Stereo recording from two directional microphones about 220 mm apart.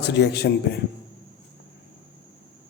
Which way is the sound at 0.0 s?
50° left (ahead or behind).